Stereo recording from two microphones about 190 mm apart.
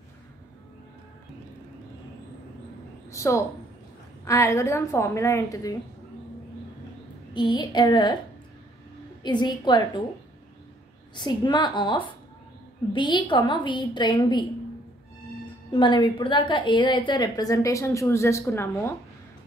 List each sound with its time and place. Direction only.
3.1 s a woman's voice: 15° left (ahead or behind)
7.3 s a woman's voice: 20° left (ahead or behind)
9.2 s a woman's voice: 25° left (ahead or behind)
11.1 s a woman's voice: 25° left (ahead or behind)
15.7 s a woman's voice: 25° left (ahead or behind)